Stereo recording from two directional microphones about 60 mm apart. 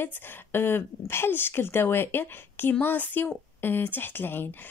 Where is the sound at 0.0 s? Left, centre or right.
Left.